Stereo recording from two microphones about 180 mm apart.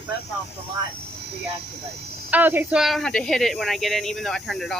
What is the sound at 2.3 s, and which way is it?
Speech, 10° right (ahead or behind).